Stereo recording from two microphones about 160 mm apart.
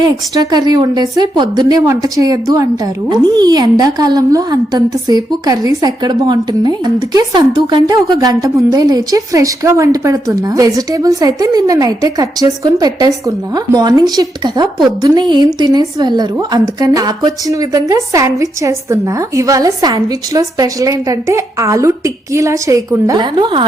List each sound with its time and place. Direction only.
0.0 s a woman's voice: 25° right (ahead or behind)